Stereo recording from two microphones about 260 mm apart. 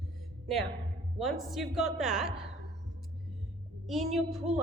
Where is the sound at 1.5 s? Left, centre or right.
Centre.